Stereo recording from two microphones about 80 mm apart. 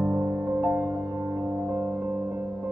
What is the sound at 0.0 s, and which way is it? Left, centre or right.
Music, right.